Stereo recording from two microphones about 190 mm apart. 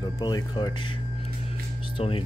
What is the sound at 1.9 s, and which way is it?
Speech, 30° left (ahead or behind).